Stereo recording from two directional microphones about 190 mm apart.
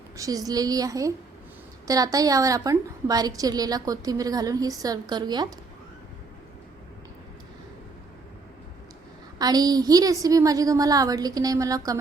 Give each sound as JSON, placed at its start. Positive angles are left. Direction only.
{"t": 0.2, "sound": "a woman's voice", "side_deg": -20}
{"t": 9.4, "sound": "a woman's voice", "side_deg": -20}